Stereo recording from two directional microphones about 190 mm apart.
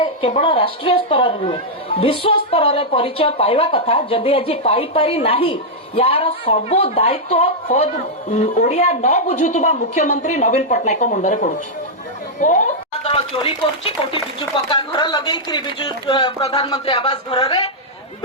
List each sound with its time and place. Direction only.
0.0 s a woman's voice: 30° left (ahead or behind)